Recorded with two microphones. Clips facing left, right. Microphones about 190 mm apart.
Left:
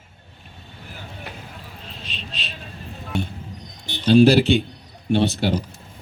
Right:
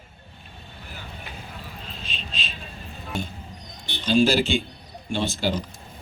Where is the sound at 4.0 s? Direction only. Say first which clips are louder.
Left 6 dB; 65° left (ahead or behind).